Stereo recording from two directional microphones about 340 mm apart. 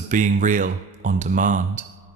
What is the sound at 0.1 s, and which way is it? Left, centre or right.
Speech, right.